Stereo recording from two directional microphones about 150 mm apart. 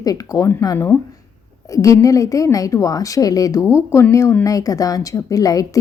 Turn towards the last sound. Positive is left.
turn(degrees=25)  # may be behind; listen again after turning